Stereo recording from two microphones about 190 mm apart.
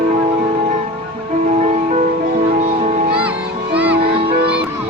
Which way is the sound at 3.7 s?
5° right (ahead or behind).